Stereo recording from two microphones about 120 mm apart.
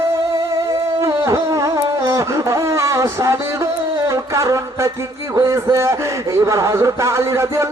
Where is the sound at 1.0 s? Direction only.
25° right (ahead or behind).